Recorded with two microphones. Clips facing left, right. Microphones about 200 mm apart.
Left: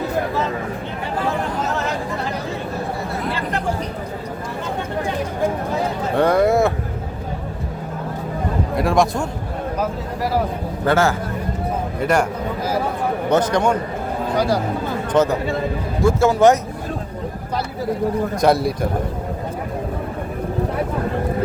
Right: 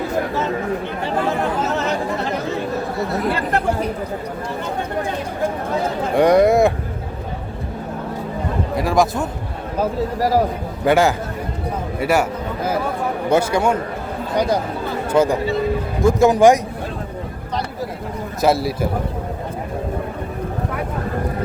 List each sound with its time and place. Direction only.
6.1 s speech: 15° right (ahead or behind)
8.7 s a man's voice: centre (ahead or behind)
9.7 s speech: 35° right (ahead or behind)
10.8 s speech: 15° right (ahead or behind)
13.3 s speech: 10° right (ahead or behind)
14.3 s speech: 20° right (ahead or behind)
18.3 s a man's voice: 5° right (ahead or behind)